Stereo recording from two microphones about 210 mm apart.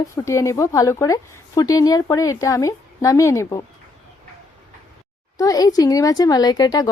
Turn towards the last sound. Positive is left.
turn(degrees=20)  # may be behind; listen again after turning